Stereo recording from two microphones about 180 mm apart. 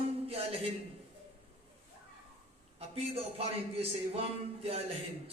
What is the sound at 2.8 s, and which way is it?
A man's voice, 35° right (ahead or behind).